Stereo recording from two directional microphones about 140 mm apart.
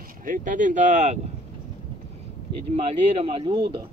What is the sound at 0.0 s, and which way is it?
Speech, 75° right (ahead or behind).